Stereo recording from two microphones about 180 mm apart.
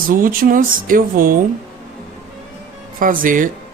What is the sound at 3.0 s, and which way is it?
Speech, 50° right (ahead or behind).